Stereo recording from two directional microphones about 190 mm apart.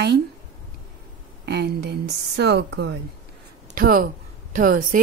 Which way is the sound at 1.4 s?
60° right (ahead or behind).